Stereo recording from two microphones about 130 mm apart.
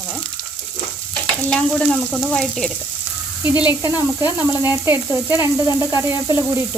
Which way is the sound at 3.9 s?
15° right (ahead or behind).